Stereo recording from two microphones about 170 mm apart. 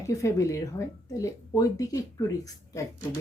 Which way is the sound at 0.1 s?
20° left (ahead or behind).